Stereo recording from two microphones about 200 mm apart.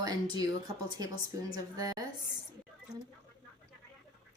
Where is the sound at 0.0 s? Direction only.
20° right (ahead or behind).